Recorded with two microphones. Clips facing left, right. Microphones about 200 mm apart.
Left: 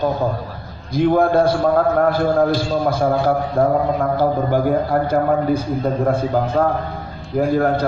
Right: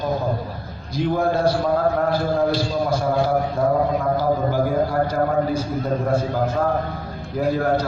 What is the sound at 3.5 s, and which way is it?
A man's voice, 55° left (ahead or behind).